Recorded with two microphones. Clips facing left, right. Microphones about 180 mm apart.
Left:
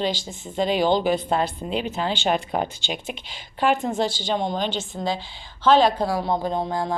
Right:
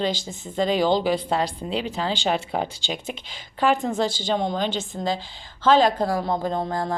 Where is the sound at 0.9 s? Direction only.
90° right.